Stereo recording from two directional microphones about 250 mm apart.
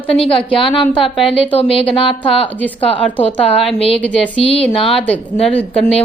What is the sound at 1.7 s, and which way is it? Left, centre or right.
Speech, left.